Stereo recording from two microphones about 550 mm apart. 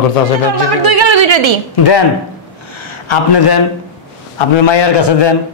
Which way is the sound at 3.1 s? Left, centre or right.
Left.